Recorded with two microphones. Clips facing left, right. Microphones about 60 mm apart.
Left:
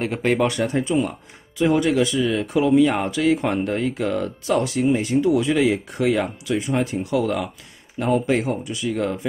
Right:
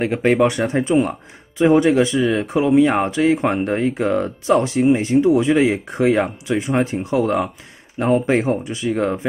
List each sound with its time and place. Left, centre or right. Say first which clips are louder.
0.0 s speech: right 4 dB; right